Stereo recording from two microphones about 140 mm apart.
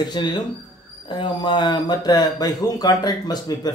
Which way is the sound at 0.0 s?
30° left (ahead or behind).